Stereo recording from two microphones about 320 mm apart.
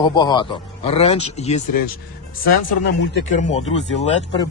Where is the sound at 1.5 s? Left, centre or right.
Left.